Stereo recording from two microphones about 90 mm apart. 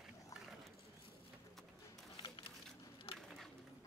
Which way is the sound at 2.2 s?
85° left.